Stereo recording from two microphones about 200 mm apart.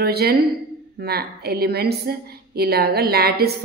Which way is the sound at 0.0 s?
50° right (ahead or behind).